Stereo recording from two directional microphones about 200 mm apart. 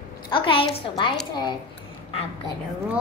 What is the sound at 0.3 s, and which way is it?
Speech, 25° left (ahead or behind).